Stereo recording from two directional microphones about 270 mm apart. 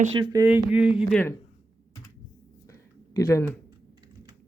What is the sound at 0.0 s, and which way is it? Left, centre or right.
Speech, centre.